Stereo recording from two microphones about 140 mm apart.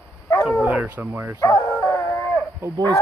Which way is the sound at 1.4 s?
20° left (ahead or behind).